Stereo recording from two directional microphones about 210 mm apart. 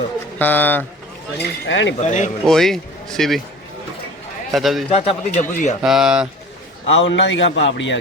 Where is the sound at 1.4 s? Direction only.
60° left (ahead or behind).